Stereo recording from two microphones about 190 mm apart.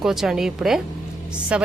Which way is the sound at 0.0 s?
Centre (ahead or behind).